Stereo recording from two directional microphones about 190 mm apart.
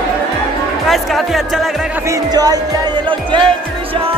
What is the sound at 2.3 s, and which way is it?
Speech, 20° right (ahead or behind).